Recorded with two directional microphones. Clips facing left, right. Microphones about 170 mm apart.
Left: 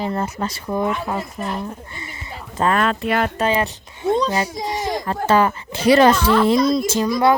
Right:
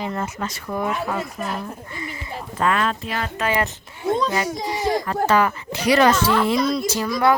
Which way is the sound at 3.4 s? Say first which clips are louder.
Left 3 dB; 25° left (ahead or behind).